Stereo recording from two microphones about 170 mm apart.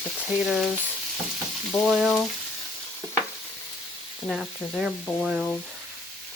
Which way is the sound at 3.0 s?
15° right (ahead or behind).